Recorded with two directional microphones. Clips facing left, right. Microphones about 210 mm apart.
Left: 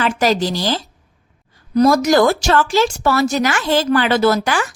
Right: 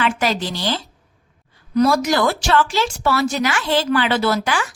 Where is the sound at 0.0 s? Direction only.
40° left (ahead or behind).